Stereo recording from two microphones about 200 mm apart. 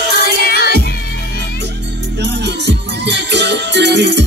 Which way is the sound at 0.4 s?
50° left (ahead or behind).